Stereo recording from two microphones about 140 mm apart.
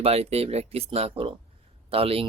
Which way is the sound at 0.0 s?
45° right (ahead or behind).